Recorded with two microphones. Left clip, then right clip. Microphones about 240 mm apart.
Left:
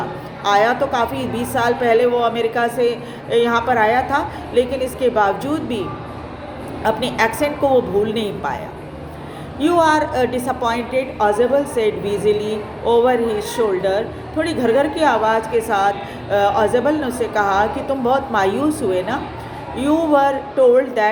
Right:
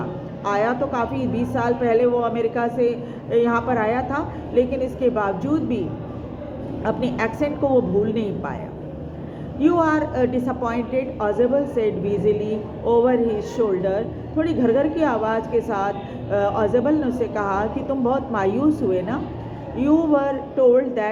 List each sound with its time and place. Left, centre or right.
0.4 s a woman's voice: left
6.8 s a woman's voice: left
9.6 s a woman's voice: left